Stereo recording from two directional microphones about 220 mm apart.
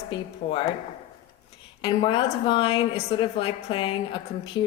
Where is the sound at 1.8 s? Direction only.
25° left (ahead or behind).